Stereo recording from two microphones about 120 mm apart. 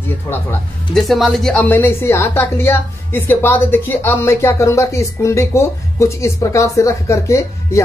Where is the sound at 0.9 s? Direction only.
Centre (ahead or behind).